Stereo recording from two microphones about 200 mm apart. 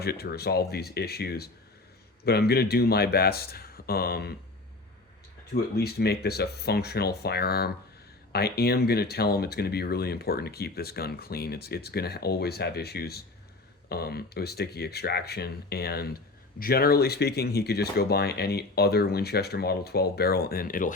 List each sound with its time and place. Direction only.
0.0 s speech: 50° left (ahead or behind)
5.5 s speech: 50° left (ahead or behind)